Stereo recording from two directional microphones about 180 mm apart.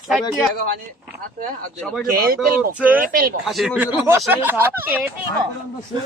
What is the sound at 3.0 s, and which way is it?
Speech, 50° right (ahead or behind).